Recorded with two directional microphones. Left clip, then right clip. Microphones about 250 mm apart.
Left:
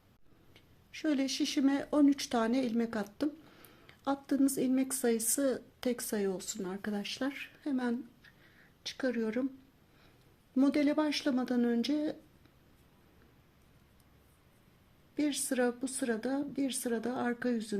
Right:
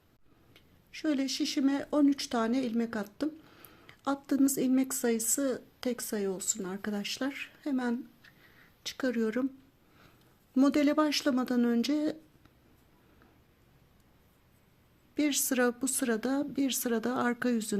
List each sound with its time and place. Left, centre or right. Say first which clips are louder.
0.5 s speech: right 1 dB; centre
10.5 s speech: right 3 dB; centre
15.1 s speech: right 3 dB; right